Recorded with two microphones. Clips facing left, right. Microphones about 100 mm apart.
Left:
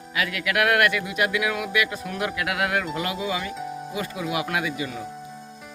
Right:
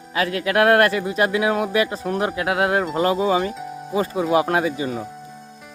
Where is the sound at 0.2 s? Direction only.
35° right (ahead or behind).